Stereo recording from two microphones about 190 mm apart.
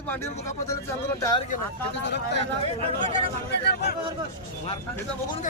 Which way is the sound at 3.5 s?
60° left (ahead or behind).